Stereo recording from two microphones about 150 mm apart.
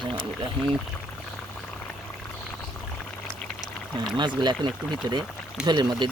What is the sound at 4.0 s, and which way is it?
Speech, 30° right (ahead or behind).